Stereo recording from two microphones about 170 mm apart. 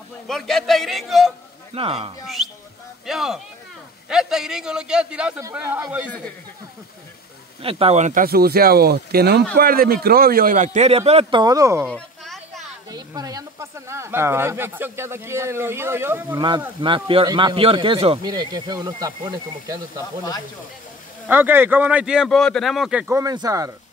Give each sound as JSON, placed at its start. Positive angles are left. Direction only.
{"t": 0.3, "sound": "a man's voice", "side_deg": 0}
{"t": 1.7, "sound": "speech", "side_deg": -35}
{"t": 2.2, "sound": "a man's voice", "side_deg": 0}
{"t": 7.6, "sound": "speech", "side_deg": -35}
{"t": 11.9, "sound": "a sound", "side_deg": 0}
{"t": 12.9, "sound": "speech", "side_deg": -20}
{"t": 16.3, "sound": "speech", "side_deg": -25}
{"t": 21.3, "sound": "speech", "side_deg": -10}
{"t": 23.1, "sound": "speech", "side_deg": -20}